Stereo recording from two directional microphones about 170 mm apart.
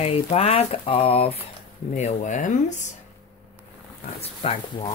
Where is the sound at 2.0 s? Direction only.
45° left (ahead or behind).